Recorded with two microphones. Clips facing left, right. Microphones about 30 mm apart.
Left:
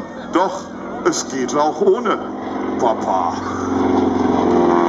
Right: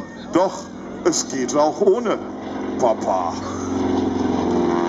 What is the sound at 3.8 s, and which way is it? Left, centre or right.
Vehicle, centre.